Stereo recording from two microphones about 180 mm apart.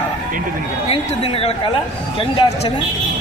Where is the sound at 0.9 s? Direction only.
35° left (ahead or behind).